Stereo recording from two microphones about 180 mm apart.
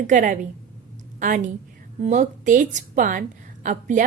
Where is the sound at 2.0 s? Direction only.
45° right (ahead or behind).